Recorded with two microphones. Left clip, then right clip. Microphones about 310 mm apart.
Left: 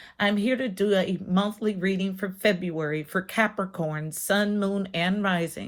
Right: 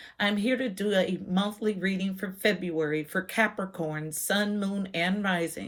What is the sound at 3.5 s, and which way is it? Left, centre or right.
Speech, left.